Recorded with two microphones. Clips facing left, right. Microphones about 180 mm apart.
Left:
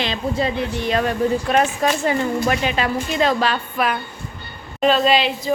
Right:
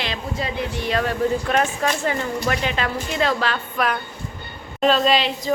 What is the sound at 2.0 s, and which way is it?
A woman's voice, 15° left (ahead or behind).